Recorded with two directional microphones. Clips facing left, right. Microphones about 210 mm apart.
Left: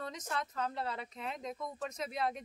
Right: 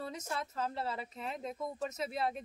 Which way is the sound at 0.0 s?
5° right (ahead or behind).